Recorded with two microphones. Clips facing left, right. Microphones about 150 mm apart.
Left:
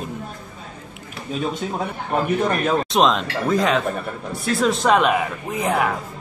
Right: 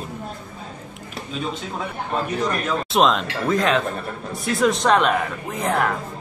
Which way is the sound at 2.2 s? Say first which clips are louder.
Left 4 dB; 55° left (ahead or behind).